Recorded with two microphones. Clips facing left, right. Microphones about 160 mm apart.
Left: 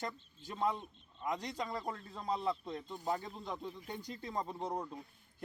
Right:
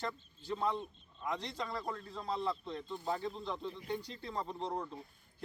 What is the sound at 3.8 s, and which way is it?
Speech, 45° left (ahead or behind).